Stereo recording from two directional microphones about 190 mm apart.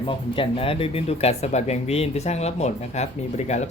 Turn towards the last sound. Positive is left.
turn(degrees=35)  # may be behind; listen again after turning